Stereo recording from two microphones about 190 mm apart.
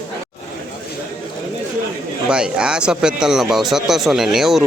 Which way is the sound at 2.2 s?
5° right (ahead or behind).